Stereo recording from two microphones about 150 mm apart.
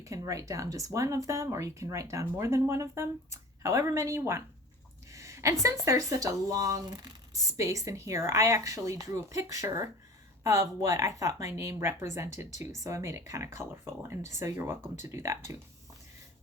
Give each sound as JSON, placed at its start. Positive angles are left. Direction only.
{"t": 0.0, "sound": "speech", "side_deg": -20}
{"t": 5.1, "sound": "a sound", "side_deg": -20}
{"t": 5.8, "sound": "speech", "side_deg": -20}
{"t": 12.5, "sound": "speech", "side_deg": 50}
{"t": 12.8, "sound": "speech", "side_deg": -20}